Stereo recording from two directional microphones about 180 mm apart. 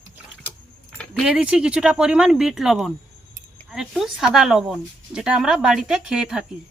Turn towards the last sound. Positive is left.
turn(degrees=-5)  # may be behind; listen again after turning